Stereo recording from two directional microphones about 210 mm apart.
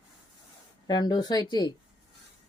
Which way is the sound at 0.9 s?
20° left (ahead or behind).